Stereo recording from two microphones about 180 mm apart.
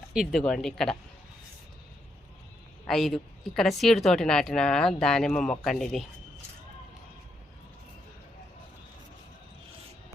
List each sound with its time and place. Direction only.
0.1 s a woman's voice: centre (ahead or behind)
2.8 s a woman's voice: centre (ahead or behind)